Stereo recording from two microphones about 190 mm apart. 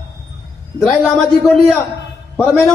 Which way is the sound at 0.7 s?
Centre (ahead or behind).